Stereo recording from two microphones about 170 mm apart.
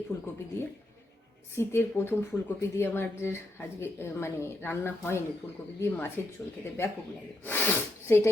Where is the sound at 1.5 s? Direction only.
15° left (ahead or behind).